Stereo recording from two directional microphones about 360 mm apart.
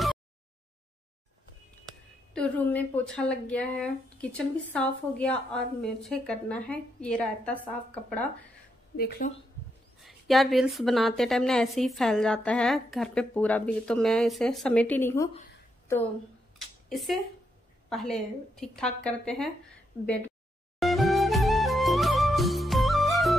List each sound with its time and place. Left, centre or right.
2.3 s a woman's voice: centre
8.9 s speech: left
10.0 s a woman's voice: centre
16.5 s a sound: centre
17.8 s a woman's voice: centre
20.8 s music: centre